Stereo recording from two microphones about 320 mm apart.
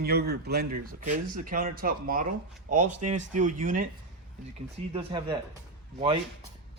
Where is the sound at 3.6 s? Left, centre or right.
Right.